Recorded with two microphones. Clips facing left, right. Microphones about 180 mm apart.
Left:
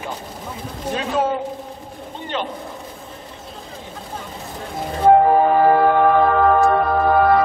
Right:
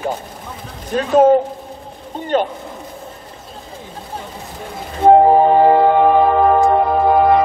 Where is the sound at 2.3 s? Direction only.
45° right (ahead or behind).